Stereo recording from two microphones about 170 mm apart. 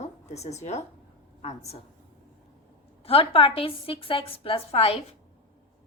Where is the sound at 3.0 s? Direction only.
35° left (ahead or behind).